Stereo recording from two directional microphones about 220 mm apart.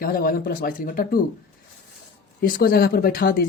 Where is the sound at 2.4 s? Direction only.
40° left (ahead or behind).